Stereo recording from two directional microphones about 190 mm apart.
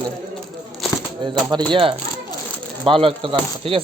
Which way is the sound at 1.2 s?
25° right (ahead or behind).